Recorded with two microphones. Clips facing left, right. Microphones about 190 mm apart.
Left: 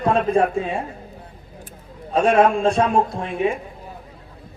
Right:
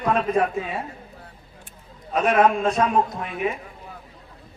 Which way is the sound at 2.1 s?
30° left (ahead or behind).